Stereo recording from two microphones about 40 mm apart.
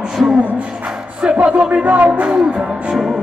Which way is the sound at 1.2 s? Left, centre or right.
Right.